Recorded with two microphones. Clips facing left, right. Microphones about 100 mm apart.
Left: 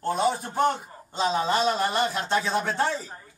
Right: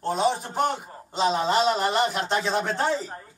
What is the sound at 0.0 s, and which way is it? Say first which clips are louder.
A man's voice: right 1 dB; 25° right (ahead or behind).